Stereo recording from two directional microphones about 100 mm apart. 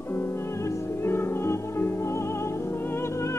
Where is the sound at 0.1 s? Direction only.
25° left (ahead or behind).